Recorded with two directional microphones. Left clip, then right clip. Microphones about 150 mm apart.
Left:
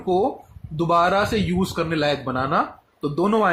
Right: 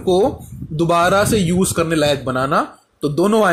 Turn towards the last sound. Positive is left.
turn(degrees=-35)  # may be behind; listen again after turning